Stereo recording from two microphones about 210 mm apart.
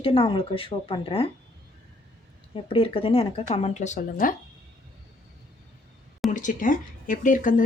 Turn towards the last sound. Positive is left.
turn(degrees=40)  # may be behind; listen again after turning